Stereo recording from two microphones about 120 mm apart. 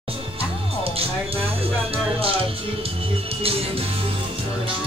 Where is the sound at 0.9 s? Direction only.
50° right (ahead or behind).